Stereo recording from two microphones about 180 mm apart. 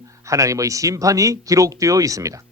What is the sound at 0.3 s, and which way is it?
Speech, 15° right (ahead or behind).